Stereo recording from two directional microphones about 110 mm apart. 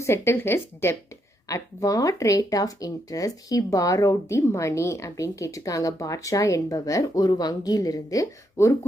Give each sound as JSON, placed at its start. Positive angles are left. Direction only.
{"t": 0.0, "sound": "speech", "side_deg": 25}